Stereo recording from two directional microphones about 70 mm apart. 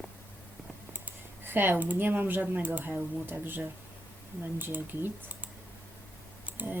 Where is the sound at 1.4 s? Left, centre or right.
Right.